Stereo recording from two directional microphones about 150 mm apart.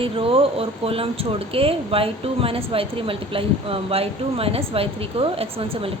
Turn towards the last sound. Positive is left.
turn(degrees=-40)  # may be behind; listen again after turning